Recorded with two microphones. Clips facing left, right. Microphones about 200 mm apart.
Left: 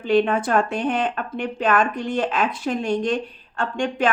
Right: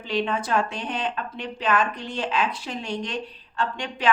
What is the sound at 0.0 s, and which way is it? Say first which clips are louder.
A woman's voice: left 7 dB; 50° left (ahead or behind).